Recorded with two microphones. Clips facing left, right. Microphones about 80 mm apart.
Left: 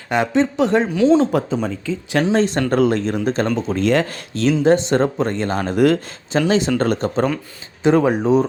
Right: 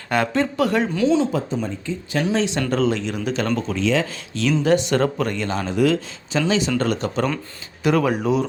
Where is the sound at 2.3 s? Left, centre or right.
Left.